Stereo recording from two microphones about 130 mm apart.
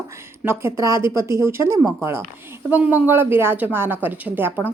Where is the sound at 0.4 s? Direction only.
25° right (ahead or behind).